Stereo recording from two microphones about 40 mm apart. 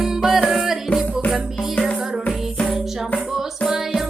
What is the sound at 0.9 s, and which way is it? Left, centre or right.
Music, left.